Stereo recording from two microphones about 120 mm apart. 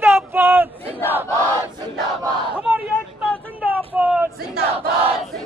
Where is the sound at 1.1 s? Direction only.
15° right (ahead or behind).